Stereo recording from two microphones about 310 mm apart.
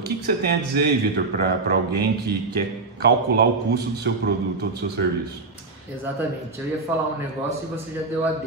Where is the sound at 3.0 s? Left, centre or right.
Right.